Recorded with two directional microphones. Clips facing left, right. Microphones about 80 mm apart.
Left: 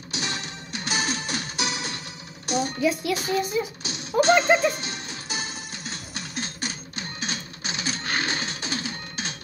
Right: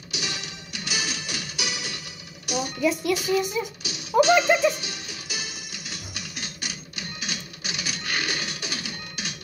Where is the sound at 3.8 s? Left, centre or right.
Left.